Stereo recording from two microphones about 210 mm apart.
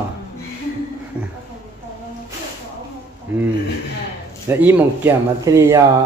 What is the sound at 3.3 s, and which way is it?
Speech, 10° right (ahead or behind).